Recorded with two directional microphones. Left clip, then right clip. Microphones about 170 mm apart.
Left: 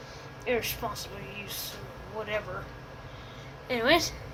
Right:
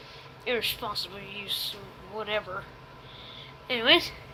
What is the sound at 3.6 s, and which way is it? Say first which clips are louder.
Speech: right 2 dB; 40° right (ahead or behind).